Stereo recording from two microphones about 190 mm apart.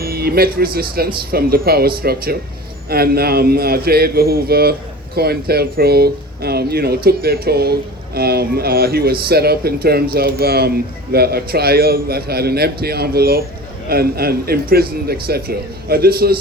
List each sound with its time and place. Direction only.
0.0 s speech: 55° right (ahead or behind)